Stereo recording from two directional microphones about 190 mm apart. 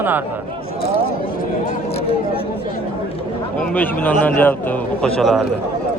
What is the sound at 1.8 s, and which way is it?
Speech, 30° left (ahead or behind).